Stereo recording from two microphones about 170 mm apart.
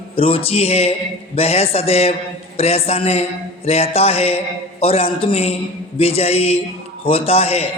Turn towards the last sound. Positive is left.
turn(degrees=35)  # may be behind; listen again after turning